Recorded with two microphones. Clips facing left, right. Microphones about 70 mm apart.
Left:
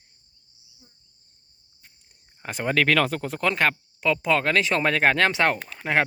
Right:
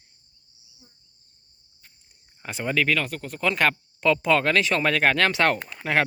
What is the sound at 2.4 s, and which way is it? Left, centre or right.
Speech, left.